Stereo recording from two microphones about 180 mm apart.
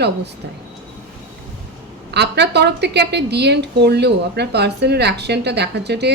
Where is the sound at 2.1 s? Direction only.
70° right (ahead or behind).